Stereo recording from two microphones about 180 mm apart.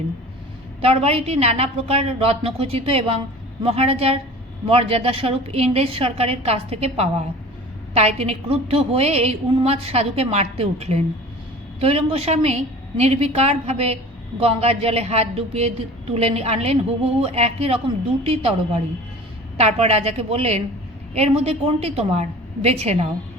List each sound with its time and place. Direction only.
0.8 s a woman's voice: 35° right (ahead or behind)
19.5 s a woman's voice: 35° right (ahead or behind)